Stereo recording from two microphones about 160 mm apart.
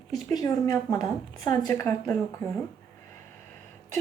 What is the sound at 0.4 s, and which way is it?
Speech, 25° left (ahead or behind).